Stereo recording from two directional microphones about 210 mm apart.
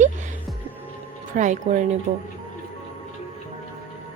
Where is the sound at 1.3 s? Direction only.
35° right (ahead or behind).